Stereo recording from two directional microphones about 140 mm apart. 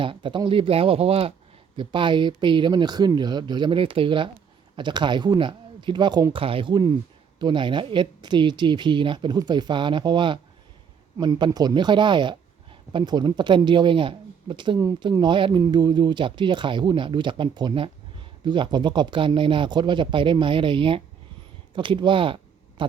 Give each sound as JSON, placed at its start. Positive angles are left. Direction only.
{"t": 0.0, "sound": "speech", "side_deg": -35}